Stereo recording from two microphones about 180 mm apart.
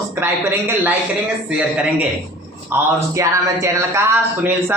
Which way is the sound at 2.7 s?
10° right (ahead or behind).